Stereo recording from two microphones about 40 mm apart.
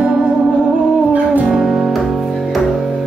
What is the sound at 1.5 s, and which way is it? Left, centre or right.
Music, centre.